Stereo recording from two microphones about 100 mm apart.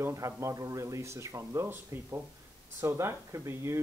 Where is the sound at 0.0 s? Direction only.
30° right (ahead or behind).